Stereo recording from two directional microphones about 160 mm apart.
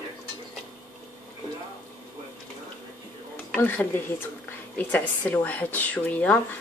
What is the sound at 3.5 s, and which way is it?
Speech, 10° left (ahead or behind).